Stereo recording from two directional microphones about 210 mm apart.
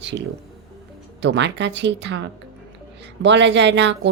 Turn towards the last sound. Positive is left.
turn(degrees=-55)  # may be behind; listen again after turning